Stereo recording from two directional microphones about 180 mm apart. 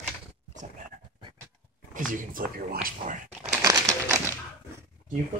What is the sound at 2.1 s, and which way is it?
Speech, 50° right (ahead or behind).